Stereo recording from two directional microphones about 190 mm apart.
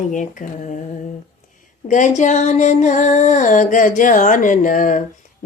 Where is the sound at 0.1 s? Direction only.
40° left (ahead or behind).